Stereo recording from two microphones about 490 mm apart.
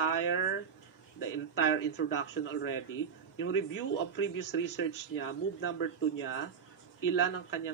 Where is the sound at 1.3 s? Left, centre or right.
Left.